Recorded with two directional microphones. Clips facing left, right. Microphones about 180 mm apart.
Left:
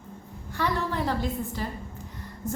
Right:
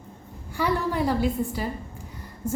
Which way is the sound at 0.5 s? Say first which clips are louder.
Right 3 dB; 10° right (ahead or behind).